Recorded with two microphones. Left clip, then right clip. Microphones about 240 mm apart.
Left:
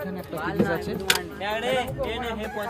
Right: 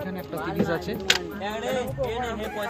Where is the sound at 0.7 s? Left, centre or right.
Centre.